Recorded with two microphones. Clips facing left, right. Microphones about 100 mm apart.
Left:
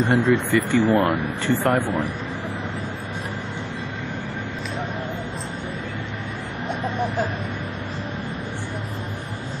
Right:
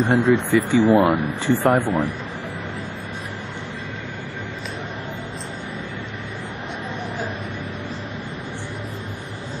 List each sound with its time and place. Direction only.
0.0 s speech: 15° right (ahead or behind)